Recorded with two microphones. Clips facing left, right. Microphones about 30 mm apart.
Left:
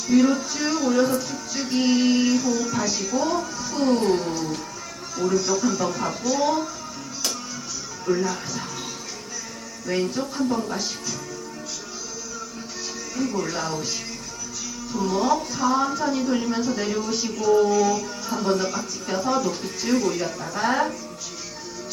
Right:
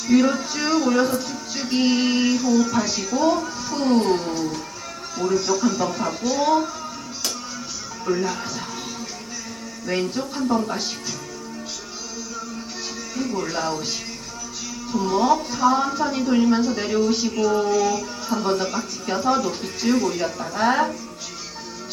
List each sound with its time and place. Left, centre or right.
0.1 s music: centre
8.0 s music: centre
9.8 s music: centre
13.1 s music: centre
14.9 s music: centre